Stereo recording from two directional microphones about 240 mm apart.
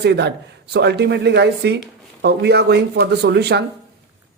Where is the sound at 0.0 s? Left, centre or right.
Right.